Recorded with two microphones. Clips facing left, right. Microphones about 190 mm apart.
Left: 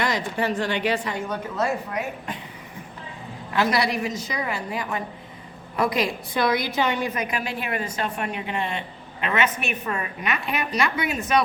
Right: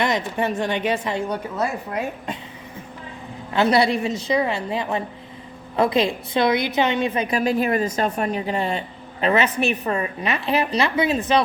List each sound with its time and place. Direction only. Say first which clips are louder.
0.0 s a woman's voice: right 3 dB; 20° right (ahead or behind)
3.5 s a woman's voice: right 5 dB; 25° right (ahead or behind)